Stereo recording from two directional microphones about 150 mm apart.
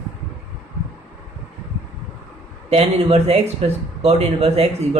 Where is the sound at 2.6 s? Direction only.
45° right (ahead or behind).